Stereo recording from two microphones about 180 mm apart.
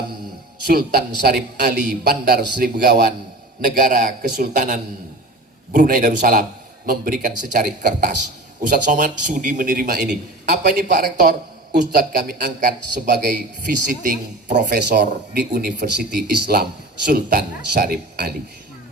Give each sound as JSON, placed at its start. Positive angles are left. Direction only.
{"t": 0.7, "sound": "speech", "side_deg": -55}
{"t": 14.5, "sound": "speech", "side_deg": -65}
{"t": 15.0, "sound": "speech", "side_deg": -50}